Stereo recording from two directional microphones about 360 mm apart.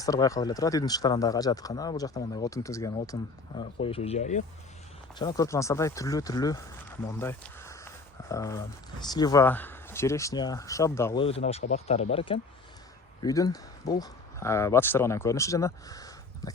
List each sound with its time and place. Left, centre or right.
0.0 s speech: centre